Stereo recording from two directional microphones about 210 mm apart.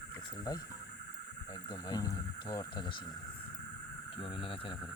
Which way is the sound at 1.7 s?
20° left (ahead or behind).